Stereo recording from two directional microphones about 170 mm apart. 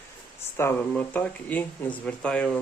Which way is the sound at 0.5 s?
10° left (ahead or behind).